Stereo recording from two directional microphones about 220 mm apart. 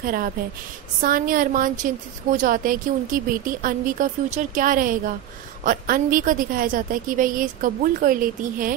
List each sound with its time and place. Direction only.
0.0 s a woman's voice: 40° right (ahead or behind)